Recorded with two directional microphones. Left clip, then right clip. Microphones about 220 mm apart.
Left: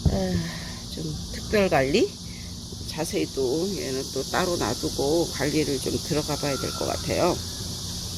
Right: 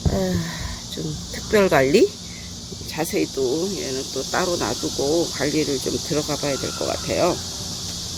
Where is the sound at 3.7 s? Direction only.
Centre (ahead or behind).